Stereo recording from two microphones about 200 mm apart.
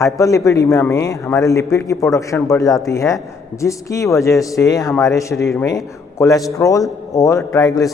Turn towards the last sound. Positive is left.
turn(degrees=15)  # may be behind; listen again after turning